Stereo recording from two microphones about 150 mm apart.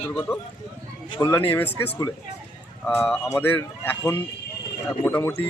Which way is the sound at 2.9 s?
15° left (ahead or behind).